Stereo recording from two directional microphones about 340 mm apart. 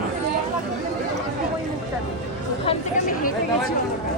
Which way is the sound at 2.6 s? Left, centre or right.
Left.